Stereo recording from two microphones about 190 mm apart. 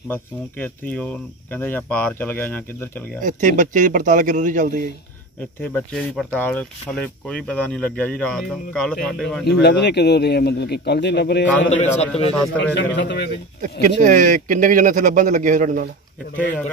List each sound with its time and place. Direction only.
0.1 s speech: 10° left (ahead or behind)
3.2 s speech: 45° right (ahead or behind)
5.6 s speech: 5° left (ahead or behind)
9.5 s speech: 60° left (ahead or behind)
11.7 s a man's voice: 35° left (ahead or behind)
12.5 s a man's voice: 65° left (ahead or behind)
13.6 s speech: 45° right (ahead or behind)